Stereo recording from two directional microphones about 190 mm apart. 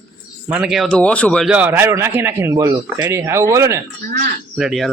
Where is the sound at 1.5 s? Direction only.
10° right (ahead or behind).